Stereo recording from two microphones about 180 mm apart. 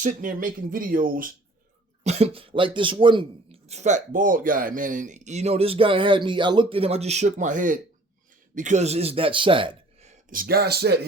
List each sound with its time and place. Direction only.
0.0 s speech: 45° right (ahead or behind)
2.0 s speech: 35° right (ahead or behind)
3.7 s speech: 40° right (ahead or behind); by 11.0 s 65° right (ahead or behind)